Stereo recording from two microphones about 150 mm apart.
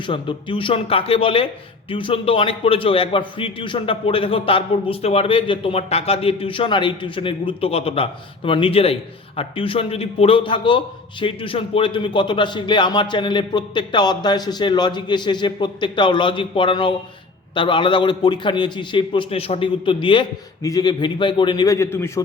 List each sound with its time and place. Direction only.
0.0 s a man's voice: 35° left (ahead or behind)
20.6 s a man's voice: 25° left (ahead or behind)